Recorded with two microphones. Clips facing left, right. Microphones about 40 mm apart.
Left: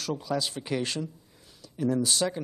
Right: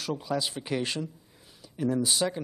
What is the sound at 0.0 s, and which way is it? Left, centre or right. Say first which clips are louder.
Speech: even; centre.